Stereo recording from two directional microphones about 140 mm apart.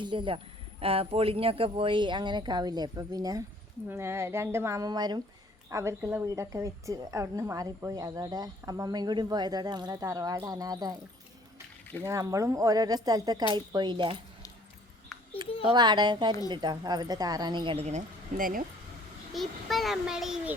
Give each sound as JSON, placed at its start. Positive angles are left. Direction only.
{"t": 0.0, "sound": "a woman's voice", "side_deg": -35}
{"t": 12.0, "sound": "a woman's voice", "side_deg": -20}
{"t": 15.6, "sound": "speech", "side_deg": -30}
{"t": 17.8, "sound": "speech", "side_deg": -65}
{"t": 19.3, "sound": "a child's voice", "side_deg": 0}